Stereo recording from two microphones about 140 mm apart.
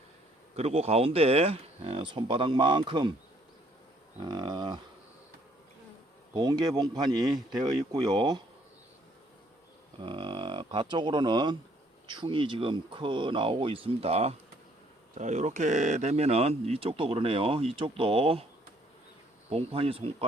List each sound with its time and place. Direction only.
0.5 s speech: 50° right (ahead or behind)
4.2 s speech: 30° right (ahead or behind)
6.3 s speech: 30° right (ahead or behind)
10.0 s speech: 35° right (ahead or behind)
15.2 s speech: 60° right (ahead or behind)
19.5 s speech: 45° right (ahead or behind)